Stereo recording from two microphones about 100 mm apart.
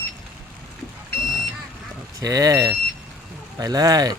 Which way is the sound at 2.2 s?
35° right (ahead or behind).